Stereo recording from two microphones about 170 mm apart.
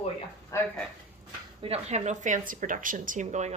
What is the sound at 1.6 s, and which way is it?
Speech, 40° right (ahead or behind).